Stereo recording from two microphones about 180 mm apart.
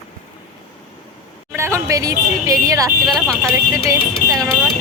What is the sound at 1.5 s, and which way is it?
Speech, 15° right (ahead or behind).